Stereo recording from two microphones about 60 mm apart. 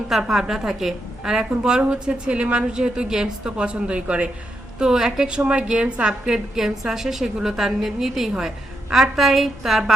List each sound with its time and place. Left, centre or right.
0.1 s a woman's voice: centre